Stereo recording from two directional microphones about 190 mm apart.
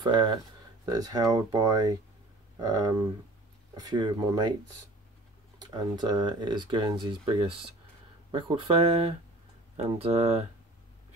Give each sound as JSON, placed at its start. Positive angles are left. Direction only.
{"t": 0.0, "sound": "speech", "side_deg": -20}
{"t": 5.6, "sound": "speech", "side_deg": -20}